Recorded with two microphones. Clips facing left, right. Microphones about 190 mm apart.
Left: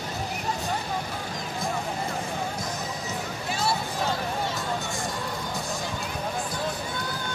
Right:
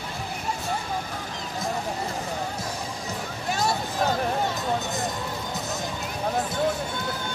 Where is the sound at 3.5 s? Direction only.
45° right (ahead or behind).